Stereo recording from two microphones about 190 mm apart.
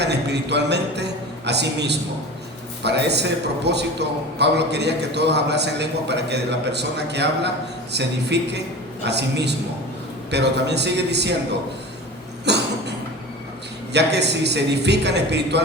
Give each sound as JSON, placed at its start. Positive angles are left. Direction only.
{"t": 0.0, "sound": "a man's voice", "side_deg": -65}
{"t": 12.5, "sound": "a sound", "side_deg": -65}
{"t": 13.9, "sound": "a man's voice", "side_deg": -60}